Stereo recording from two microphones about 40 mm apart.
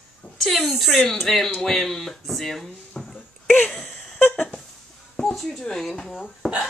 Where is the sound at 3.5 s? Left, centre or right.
Left.